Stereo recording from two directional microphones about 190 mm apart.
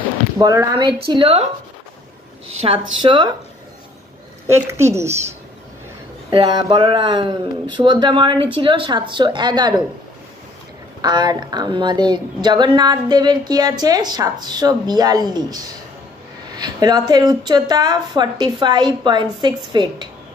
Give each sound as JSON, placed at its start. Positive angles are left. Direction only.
{"t": 0.4, "sound": "a woman's voice", "side_deg": -20}
{"t": 2.6, "sound": "a woman's voice", "side_deg": -30}
{"t": 4.5, "sound": "a woman's voice", "side_deg": -15}
{"t": 6.3, "sound": "a woman's voice", "side_deg": -25}
{"t": 11.0, "sound": "a woman's voice", "side_deg": -20}